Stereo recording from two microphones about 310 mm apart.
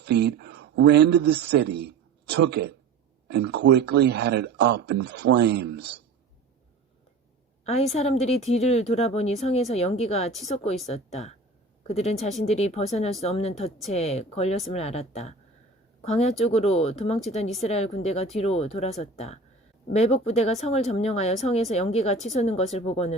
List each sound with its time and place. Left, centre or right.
0.0 s a man's voice: right
7.6 s speech: centre